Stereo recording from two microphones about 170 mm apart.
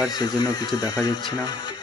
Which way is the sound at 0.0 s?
25° left (ahead or behind).